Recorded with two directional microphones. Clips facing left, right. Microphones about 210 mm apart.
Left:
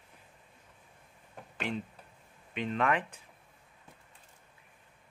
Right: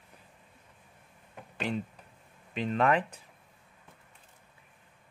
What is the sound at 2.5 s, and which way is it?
Speech, 35° right (ahead or behind).